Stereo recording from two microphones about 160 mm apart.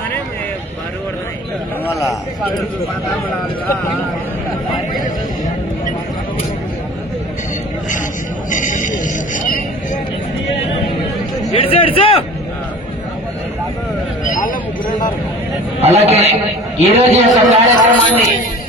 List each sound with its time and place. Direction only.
1.9 s a man's voice: 20° left (ahead or behind)
8.5 s music: 55° left (ahead or behind)
11.5 s a sound: 35° left (ahead or behind)
15.8 s a man's voice: 40° right (ahead or behind)
17.8 s speech: 10° right (ahead or behind)